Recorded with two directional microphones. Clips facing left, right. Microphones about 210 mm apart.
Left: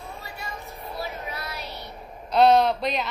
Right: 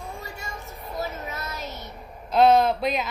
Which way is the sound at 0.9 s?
45° right (ahead or behind).